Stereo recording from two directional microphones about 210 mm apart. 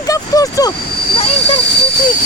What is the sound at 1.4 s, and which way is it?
Speech, 55° left (ahead or behind).